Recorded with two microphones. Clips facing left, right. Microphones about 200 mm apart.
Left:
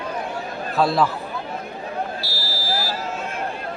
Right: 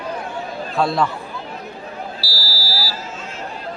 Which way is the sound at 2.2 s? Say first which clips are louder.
Even; 20° left (ahead or behind).